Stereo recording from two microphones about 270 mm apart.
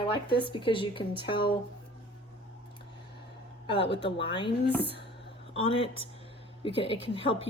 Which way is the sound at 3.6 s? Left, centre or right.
Centre.